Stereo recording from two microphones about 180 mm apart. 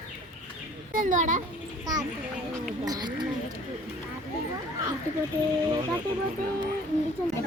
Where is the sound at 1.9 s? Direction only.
20° right (ahead or behind).